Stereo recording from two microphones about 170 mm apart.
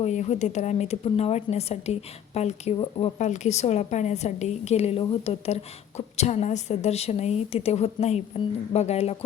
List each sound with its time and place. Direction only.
0.0 s a woman's voice: 45° left (ahead or behind)